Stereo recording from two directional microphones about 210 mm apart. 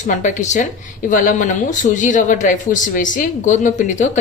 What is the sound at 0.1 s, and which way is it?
Speech, 35° left (ahead or behind).